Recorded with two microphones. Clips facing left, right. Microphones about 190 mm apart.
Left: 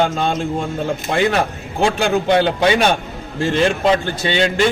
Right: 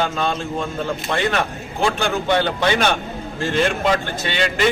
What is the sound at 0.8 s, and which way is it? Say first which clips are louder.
A man's voice: left 6 dB; 30° left (ahead or behind).